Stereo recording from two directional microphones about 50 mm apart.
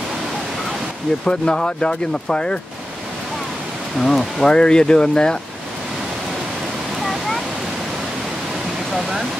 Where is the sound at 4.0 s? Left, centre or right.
Centre.